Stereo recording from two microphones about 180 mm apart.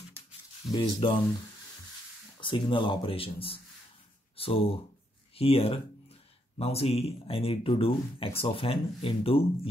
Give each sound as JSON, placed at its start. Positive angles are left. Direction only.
{"t": 0.7, "sound": "speech", "side_deg": 25}
{"t": 2.4, "sound": "speech", "side_deg": 25}